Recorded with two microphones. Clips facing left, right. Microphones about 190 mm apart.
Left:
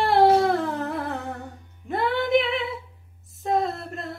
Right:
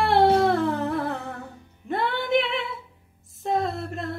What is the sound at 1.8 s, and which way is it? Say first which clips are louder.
Music: left 2 dB; centre (ahead or behind).